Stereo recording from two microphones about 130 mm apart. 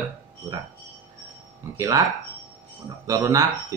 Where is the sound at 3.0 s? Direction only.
25° right (ahead or behind).